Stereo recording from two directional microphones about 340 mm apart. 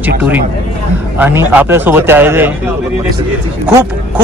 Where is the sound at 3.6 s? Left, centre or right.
Centre.